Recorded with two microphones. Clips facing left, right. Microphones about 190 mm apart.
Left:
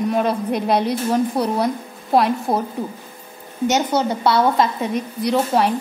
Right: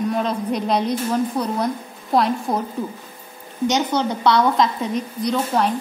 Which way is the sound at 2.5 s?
30° left (ahead or behind).